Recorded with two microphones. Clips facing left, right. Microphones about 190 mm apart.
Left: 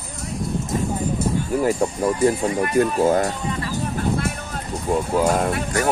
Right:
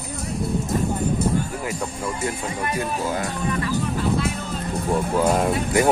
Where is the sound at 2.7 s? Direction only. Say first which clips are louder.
Left 10 dB; 50° left (ahead or behind).